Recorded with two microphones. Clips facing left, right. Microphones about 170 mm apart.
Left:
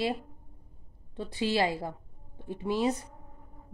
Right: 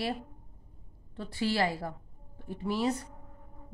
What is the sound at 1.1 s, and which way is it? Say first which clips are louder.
Speech: left 2 dB; 20° left (ahead or behind).